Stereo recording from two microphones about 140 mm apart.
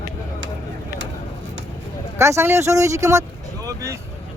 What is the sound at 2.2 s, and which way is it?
Speech, 20° right (ahead or behind).